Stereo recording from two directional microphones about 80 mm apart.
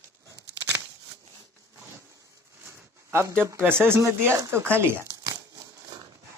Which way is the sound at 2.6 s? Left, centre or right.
Right.